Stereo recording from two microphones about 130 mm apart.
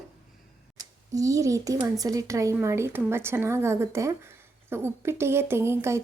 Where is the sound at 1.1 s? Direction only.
25° right (ahead or behind).